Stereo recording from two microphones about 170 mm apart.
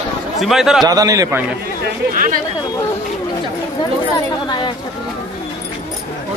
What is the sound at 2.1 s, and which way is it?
Speech, 50° right (ahead or behind).